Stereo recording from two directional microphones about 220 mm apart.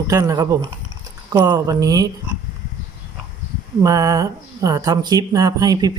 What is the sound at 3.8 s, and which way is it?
Speech, 15° right (ahead or behind).